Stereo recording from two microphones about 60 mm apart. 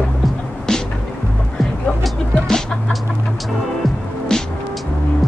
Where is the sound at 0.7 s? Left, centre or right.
Centre.